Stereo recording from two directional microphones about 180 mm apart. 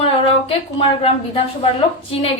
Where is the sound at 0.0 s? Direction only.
30° left (ahead or behind).